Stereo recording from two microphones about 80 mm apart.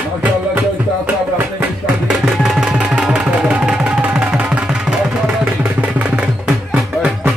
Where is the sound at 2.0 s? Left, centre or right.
Centre.